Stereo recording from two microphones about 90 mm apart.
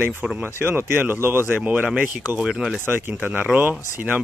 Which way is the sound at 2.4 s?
5° right (ahead or behind).